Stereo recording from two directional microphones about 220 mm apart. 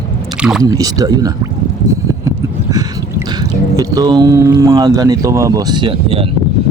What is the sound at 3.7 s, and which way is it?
Speech, 15° right (ahead or behind).